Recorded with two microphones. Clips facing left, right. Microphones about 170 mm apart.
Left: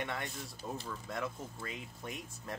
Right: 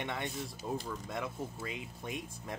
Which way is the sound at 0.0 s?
20° right (ahead or behind).